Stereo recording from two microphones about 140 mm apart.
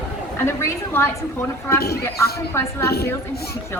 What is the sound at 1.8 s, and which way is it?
Speech, 90° left.